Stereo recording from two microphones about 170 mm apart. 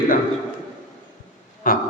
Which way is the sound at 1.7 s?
55° left (ahead or behind).